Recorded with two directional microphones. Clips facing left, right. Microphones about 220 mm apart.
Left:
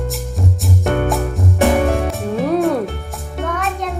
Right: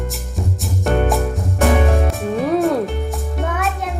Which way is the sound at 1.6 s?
Centre (ahead or behind).